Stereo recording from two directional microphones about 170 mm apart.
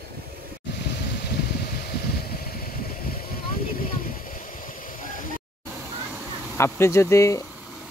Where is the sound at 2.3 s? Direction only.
60° left (ahead or behind).